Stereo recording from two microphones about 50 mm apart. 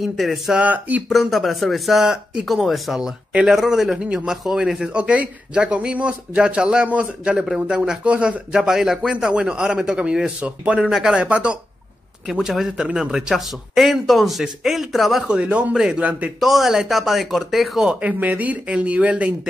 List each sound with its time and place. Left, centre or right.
0.0 s a man's voice: centre
0.6 s speech: right
1.0 s a man's voice: centre
4.9 s speech: right
8.5 s speech: centre
12.3 s a man's voice: centre
15.2 s speech: right
15.7 s speech: centre
16.0 s speech: right
16.3 s a man's voice: centre
18.0 s speech: right